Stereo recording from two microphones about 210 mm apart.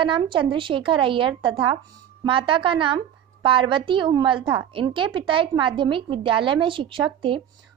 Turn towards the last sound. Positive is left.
turn(degrees=-25)  # may be behind; listen again after turning